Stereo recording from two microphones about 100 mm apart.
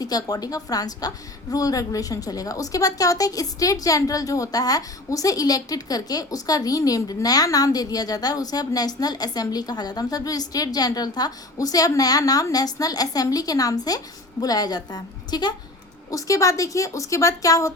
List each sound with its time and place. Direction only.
0.0 s a woman's voice: 40° left (ahead or behind)
16.0 s a woman's voice: 35° left (ahead or behind)